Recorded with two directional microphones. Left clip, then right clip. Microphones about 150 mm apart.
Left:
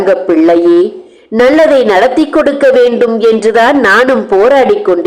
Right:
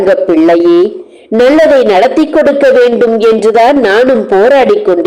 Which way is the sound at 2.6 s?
15° right (ahead or behind).